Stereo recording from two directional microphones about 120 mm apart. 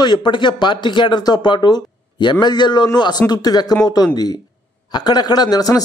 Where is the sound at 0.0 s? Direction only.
40° left (ahead or behind).